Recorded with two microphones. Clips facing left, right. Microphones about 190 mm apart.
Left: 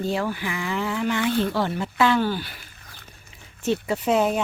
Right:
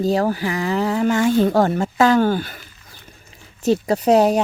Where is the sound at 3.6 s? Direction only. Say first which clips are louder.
Right 6 dB; 40° right (ahead or behind).